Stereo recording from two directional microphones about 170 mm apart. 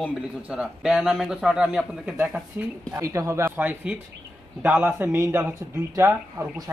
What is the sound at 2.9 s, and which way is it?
Speech, 15° right (ahead or behind).